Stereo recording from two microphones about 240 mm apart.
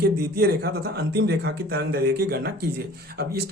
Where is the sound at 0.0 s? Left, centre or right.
Right.